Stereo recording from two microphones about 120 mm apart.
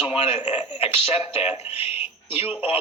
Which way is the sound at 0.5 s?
50° left (ahead or behind).